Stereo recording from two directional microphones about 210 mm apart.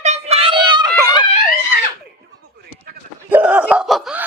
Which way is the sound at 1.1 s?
25° left (ahead or behind).